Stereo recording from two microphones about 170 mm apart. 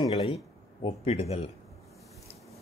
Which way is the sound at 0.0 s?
35° left (ahead or behind).